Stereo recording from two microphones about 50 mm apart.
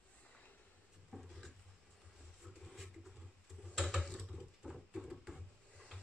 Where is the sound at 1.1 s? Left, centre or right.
Centre.